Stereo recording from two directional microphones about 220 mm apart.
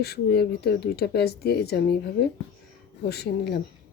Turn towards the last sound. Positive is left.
turn(degrees=45)  # may be behind; listen again after turning